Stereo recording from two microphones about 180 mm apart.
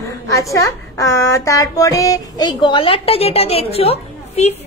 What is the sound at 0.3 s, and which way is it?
A woman's voice, 20° left (ahead or behind).